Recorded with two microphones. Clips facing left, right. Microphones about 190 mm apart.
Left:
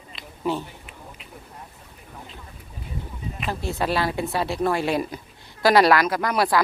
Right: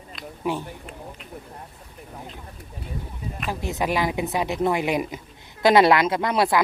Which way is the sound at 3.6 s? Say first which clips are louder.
Even; 15° right (ahead or behind).